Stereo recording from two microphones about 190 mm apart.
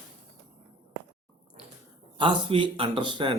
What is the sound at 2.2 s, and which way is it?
Speech, 25° right (ahead or behind).